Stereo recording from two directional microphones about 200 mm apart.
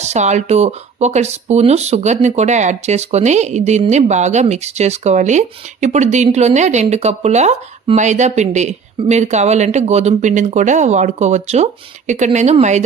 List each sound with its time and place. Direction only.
0.0 s speech: 35° right (ahead or behind)